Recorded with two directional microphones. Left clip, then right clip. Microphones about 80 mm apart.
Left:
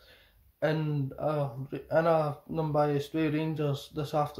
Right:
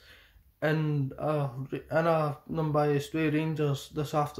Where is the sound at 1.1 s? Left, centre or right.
Left.